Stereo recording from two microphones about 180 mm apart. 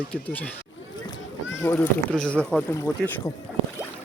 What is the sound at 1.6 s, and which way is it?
Speech, 10° left (ahead or behind).